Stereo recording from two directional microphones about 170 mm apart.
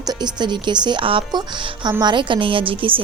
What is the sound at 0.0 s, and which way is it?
Speech, 25° right (ahead or behind).